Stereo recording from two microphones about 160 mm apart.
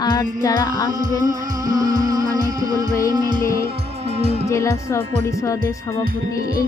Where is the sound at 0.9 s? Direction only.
25° right (ahead or behind).